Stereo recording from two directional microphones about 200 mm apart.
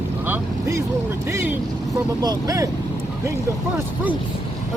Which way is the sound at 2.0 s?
20° right (ahead or behind).